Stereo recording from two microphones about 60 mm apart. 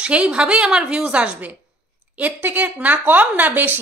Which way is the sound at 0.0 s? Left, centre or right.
Centre.